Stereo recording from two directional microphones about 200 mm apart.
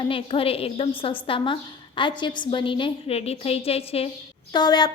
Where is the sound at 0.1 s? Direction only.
25° left (ahead or behind).